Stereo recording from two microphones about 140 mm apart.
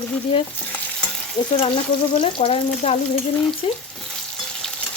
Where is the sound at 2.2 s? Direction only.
40° left (ahead or behind).